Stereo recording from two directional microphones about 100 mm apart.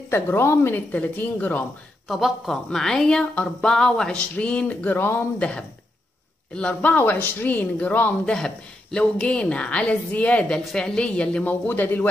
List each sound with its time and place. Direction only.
0.1 s speech: 25° left (ahead or behind)
2.0 s speech: centre (ahead or behind); by 12.1 s 20° left (ahead or behind)